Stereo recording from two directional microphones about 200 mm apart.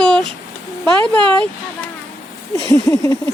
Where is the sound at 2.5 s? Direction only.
15° left (ahead or behind).